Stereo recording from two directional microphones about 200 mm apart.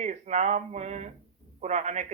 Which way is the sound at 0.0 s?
35° right (ahead or behind).